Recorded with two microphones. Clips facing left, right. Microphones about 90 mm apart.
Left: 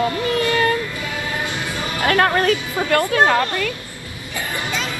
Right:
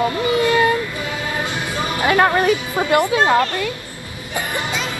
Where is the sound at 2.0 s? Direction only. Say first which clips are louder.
Right 1 dB; 10° right (ahead or behind).